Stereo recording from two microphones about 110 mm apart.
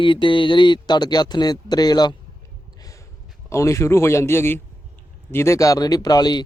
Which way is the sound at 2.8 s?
30° left (ahead or behind).